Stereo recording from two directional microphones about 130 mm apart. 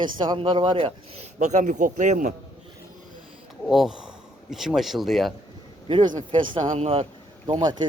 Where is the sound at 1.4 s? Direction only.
70° right (ahead or behind).